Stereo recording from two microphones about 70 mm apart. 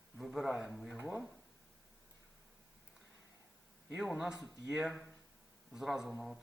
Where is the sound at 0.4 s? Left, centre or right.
Centre.